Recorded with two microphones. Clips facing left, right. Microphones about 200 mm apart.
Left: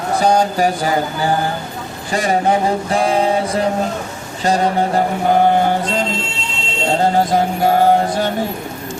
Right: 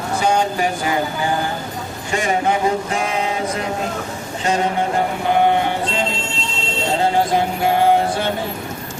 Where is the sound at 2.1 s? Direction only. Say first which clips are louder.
Left 3 dB; 35° left (ahead or behind).